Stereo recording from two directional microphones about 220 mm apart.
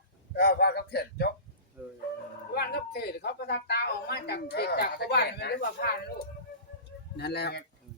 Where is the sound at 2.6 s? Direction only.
45° left (ahead or behind).